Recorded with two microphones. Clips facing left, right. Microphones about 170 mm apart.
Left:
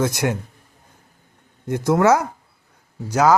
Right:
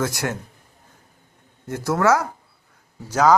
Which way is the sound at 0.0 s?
20° left (ahead or behind).